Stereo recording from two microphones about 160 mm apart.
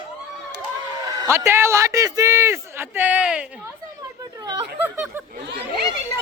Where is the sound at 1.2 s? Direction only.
15° right (ahead or behind).